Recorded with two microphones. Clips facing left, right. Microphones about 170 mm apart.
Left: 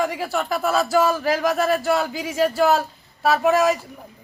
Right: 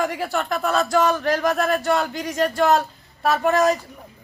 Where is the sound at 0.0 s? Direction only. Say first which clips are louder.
Even; centre (ahead or behind).